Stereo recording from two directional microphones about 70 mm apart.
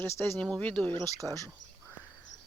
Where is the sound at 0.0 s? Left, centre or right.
Left.